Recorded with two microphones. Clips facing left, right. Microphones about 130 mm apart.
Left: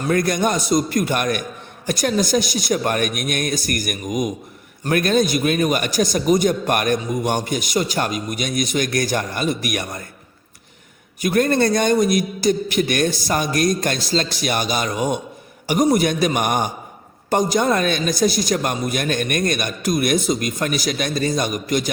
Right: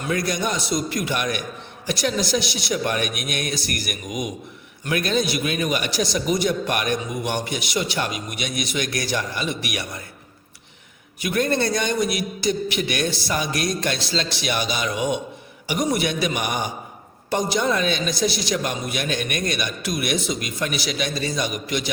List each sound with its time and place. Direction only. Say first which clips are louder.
0.0 s a man's voice: left 5 dB; 50° left (ahead or behind)
11.2 s a man's voice: left 5 dB; 45° left (ahead or behind)